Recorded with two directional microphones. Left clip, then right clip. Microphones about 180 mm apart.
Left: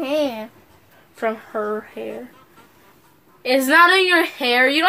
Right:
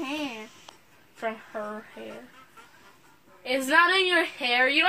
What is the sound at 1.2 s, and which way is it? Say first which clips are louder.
Speech: left 9 dB; 35° left (ahead or behind).